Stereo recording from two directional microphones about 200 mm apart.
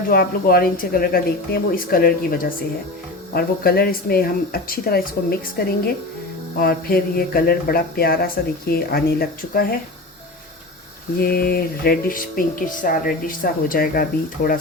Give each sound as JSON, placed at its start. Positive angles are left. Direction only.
{"t": 0.1, "sound": "speech", "side_deg": 50}
{"t": 6.6, "sound": "speech", "side_deg": 50}
{"t": 11.2, "sound": "speech", "side_deg": 50}